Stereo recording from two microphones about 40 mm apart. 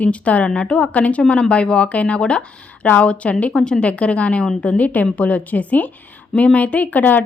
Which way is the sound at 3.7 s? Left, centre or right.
Left.